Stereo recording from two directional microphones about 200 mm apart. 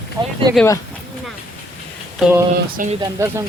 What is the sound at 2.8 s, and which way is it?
Speech, 40° right (ahead or behind).